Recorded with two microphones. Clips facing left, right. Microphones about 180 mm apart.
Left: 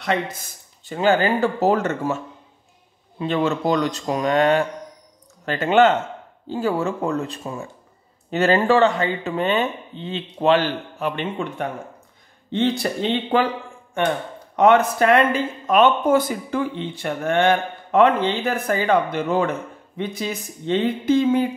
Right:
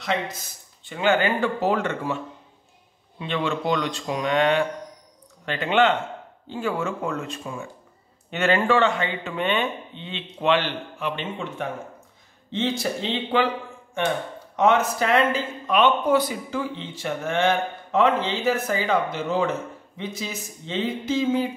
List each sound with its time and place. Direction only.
0.0 s speech: 50° left (ahead or behind)
14.6 s speech: 55° left (ahead or behind)